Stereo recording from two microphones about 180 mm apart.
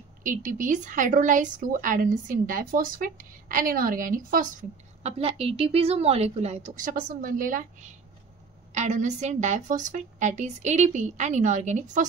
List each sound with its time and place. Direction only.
0.2 s a woman's voice: 45° right (ahead or behind)
8.7 s a woman's voice: 40° right (ahead or behind)